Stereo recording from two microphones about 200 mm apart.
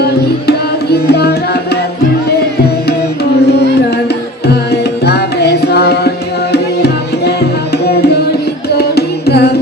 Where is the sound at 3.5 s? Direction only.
55° left (ahead or behind).